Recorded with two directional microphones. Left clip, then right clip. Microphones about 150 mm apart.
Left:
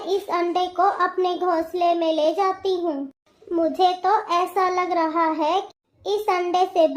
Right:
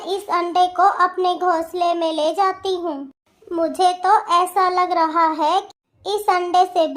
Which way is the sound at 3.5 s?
35° right (ahead or behind).